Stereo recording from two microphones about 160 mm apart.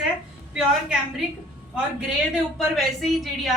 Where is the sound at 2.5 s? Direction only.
Centre (ahead or behind).